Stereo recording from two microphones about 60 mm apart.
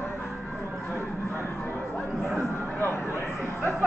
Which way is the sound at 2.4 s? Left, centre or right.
Left.